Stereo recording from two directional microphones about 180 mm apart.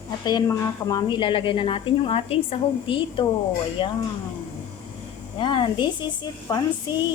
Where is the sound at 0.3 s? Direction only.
20° left (ahead or behind).